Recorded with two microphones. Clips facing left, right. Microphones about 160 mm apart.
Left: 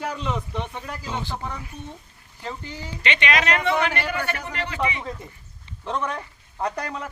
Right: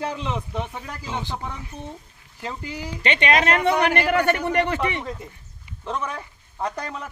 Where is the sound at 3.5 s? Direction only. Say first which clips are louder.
Right 3 dB; 50° right (ahead or behind).